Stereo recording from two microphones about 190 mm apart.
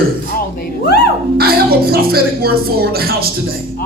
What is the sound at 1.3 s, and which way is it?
Speech, 55° right (ahead or behind).